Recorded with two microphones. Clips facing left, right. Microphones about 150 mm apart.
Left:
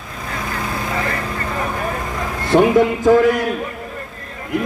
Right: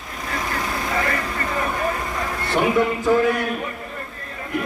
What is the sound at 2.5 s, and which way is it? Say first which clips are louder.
Speech: left 8 dB; 45° left (ahead or behind).